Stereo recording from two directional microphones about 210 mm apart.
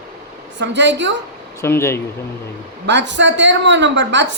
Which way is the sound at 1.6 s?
10° left (ahead or behind).